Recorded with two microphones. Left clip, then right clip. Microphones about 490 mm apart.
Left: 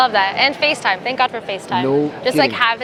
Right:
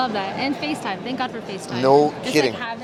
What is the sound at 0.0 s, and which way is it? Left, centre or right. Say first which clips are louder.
A woman's voice: left 9 dB; left.